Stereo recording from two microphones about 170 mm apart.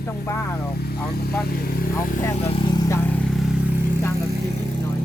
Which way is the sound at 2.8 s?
15° left (ahead or behind).